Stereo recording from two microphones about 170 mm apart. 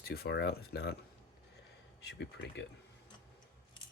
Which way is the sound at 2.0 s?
85° left.